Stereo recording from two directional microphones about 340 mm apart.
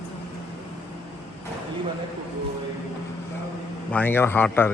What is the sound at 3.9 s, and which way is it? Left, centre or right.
Speech, centre.